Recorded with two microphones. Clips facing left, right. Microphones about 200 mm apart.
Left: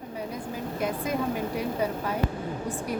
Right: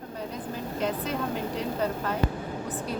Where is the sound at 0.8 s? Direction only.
10° left (ahead or behind).